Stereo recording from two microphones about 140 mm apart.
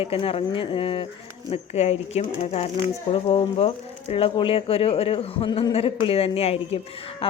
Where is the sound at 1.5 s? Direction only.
50° left (ahead or behind).